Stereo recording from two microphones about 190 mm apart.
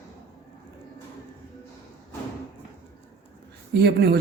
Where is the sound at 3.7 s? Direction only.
60° right (ahead or behind).